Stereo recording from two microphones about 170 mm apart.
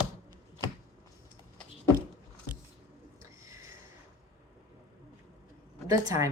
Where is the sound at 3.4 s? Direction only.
20° right (ahead or behind).